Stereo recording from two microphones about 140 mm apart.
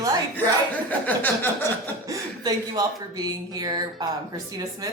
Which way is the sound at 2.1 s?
25° right (ahead or behind).